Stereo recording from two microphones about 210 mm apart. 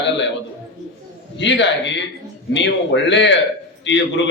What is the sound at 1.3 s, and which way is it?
A man's voice, 55° left (ahead or behind).